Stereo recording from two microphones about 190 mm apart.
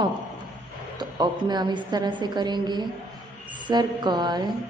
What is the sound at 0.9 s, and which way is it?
A man's voice, 20° right (ahead or behind).